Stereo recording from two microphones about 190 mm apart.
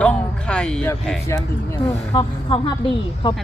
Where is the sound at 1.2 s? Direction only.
15° left (ahead or behind).